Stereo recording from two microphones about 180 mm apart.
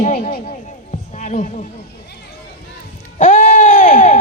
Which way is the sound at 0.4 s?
40° left (ahead or behind).